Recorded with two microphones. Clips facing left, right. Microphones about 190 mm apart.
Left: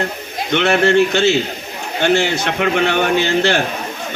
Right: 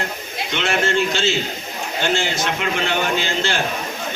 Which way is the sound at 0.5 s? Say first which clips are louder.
Left 7 dB; 60° left (ahead or behind).